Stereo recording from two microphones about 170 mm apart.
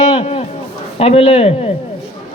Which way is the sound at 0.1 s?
35° left (ahead or behind).